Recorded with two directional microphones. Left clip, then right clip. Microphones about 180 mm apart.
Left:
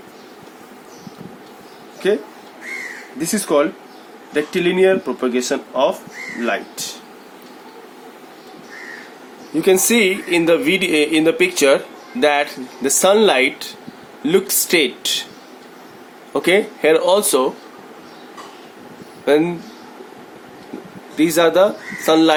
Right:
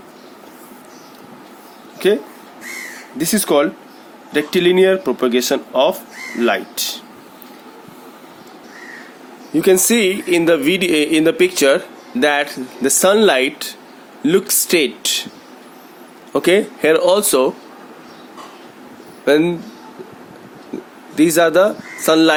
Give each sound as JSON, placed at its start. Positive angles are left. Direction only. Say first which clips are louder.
{"t": 2.0, "sound": "speech", "louder": "right 3 dB", "side_deg": -50}
{"t": 9.6, "sound": "speech", "louder": "right 1 dB", "side_deg": -35}
{"t": 16.3, "sound": "speech", "louder": "right 1 dB", "side_deg": -35}
{"t": 19.2, "sound": "speech", "louder": "right 1 dB", "side_deg": -35}
{"t": 21.2, "sound": "speech", "louder": "right 1 dB", "side_deg": -35}